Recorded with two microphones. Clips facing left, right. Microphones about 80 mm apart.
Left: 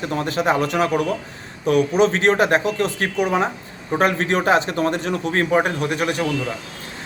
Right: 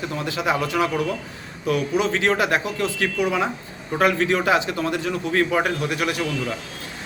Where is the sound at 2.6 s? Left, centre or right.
Left.